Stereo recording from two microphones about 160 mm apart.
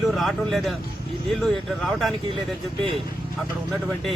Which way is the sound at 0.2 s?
Centre (ahead or behind).